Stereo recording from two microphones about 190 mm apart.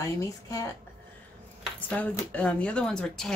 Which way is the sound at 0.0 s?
15° left (ahead or behind).